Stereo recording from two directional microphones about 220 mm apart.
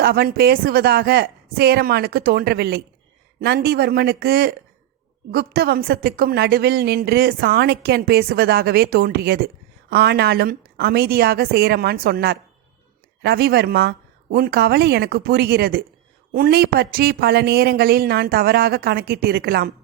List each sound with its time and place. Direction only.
0.0 s a woman's voice: 45° right (ahead or behind)